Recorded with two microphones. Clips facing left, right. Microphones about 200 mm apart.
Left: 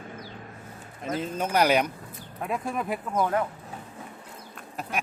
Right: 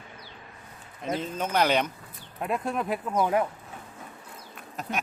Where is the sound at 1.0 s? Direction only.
10° left (ahead or behind).